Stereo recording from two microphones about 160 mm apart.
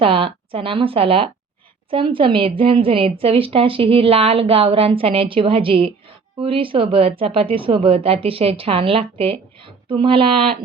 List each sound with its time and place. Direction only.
0.0 s speech: 35° right (ahead or behind)